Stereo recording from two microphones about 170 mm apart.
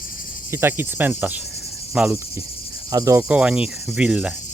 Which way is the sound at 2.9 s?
20° right (ahead or behind).